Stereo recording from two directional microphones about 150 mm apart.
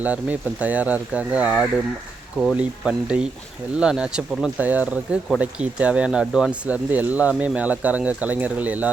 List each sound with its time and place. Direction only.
0.0 s speech: 10° right (ahead or behind)